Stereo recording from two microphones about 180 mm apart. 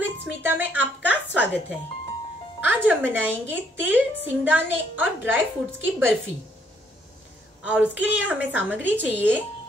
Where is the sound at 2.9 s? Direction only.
10° right (ahead or behind).